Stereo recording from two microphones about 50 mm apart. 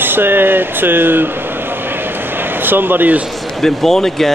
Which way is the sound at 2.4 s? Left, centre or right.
Right.